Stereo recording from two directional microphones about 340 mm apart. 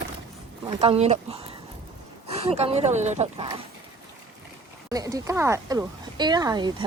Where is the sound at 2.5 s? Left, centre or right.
Centre.